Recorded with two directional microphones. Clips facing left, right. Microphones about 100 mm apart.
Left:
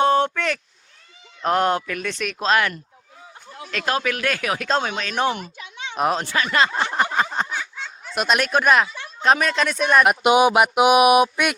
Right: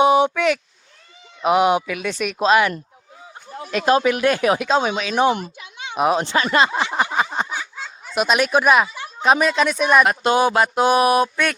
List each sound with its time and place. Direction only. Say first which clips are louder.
0.0 s a sound: right 3 dB; 10° right (ahead or behind)
1.4 s speech: right 3 dB; 10° right (ahead or behind)
4.7 s speech: right 4 dB; 10° right (ahead or behind)
6.2 s speech: right 3 dB; 25° right (ahead or behind)
6.9 s a sound: right 1 dB; 5° right (ahead or behind)
10.0 s speech: left 1 dB; 15° left (ahead or behind)